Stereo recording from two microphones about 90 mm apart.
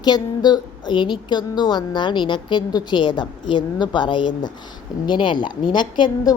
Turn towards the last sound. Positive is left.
turn(degrees=50)  # may be behind; listen again after turning